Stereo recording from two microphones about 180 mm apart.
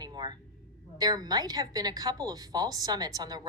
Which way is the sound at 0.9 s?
20° right (ahead or behind).